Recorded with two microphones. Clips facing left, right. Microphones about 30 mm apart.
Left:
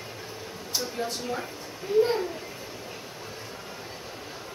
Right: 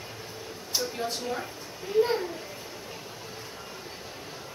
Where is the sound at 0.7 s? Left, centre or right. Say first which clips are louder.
Even; centre.